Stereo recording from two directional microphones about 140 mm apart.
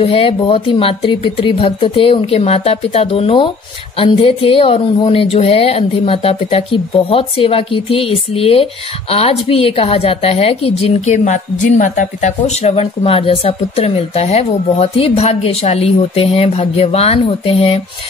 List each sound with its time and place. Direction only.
0.0 s a woman's voice: 40° left (ahead or behind)